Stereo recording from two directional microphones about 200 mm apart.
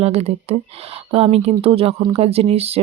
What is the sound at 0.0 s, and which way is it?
Speech, 30° right (ahead or behind).